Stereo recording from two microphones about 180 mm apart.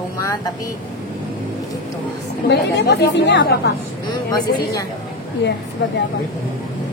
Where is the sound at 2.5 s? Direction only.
65° left (ahead or behind).